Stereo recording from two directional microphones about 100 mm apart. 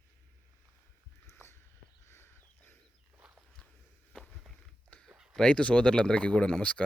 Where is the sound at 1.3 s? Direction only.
25° left (ahead or behind).